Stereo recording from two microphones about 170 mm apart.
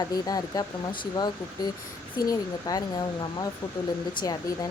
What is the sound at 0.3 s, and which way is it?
Speech, 20° left (ahead or behind).